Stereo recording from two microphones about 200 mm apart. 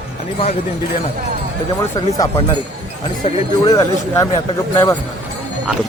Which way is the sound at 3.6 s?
15° left (ahead or behind).